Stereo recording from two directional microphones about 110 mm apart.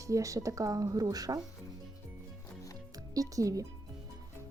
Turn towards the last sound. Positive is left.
turn(degrees=-30)  # may be behind; listen again after turning